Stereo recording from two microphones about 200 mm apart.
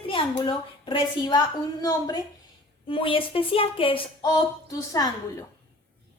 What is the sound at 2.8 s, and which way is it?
Speech, 25° left (ahead or behind).